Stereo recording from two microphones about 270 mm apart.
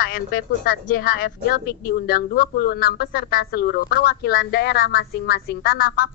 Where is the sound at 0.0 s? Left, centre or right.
Left.